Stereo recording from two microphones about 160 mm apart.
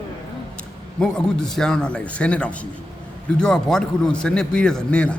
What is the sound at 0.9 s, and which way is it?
A man's voice, 5° left (ahead or behind).